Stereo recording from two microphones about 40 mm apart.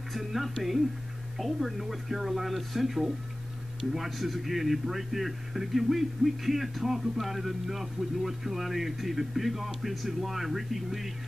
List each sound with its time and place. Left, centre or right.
0.1 s a man's voice: centre